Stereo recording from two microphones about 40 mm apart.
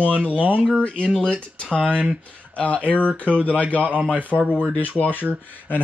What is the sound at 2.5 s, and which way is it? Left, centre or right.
Speech, left.